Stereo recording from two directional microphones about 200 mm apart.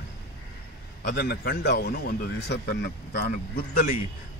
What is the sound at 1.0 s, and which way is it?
A man's voice, 55° left (ahead or behind).